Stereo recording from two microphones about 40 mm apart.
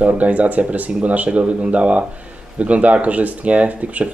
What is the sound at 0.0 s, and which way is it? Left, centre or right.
Speech, right.